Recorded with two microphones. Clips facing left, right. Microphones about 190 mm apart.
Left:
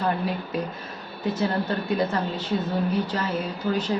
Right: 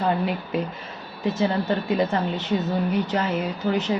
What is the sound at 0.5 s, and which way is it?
A woman's voice, 20° right (ahead or behind).